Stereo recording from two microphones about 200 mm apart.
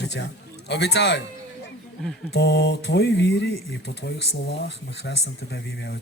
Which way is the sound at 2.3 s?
55° left (ahead or behind).